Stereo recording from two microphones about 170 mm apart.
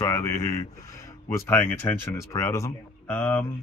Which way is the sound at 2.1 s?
15° left (ahead or behind).